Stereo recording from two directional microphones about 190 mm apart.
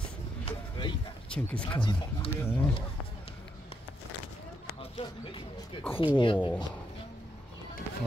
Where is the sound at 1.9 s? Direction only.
25° left (ahead or behind).